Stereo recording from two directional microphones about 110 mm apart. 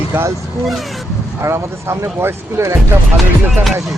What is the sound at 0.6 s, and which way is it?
Speech, centre (ahead or behind).